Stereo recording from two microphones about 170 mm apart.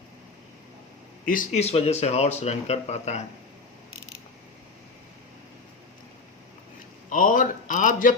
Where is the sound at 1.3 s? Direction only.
45° left (ahead or behind).